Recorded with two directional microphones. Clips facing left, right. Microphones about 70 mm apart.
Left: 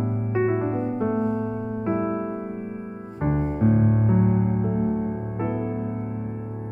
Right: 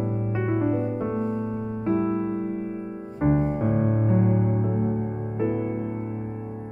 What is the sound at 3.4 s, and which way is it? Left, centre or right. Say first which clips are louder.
Music: left 2 dB; centre.